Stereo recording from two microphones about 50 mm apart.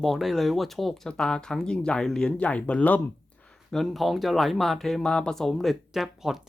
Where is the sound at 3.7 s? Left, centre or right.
Centre.